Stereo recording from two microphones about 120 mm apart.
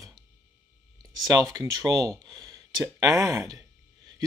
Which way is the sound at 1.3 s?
30° right (ahead or behind).